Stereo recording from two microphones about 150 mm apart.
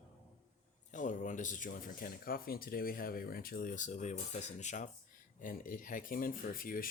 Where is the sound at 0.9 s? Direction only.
55° left (ahead or behind).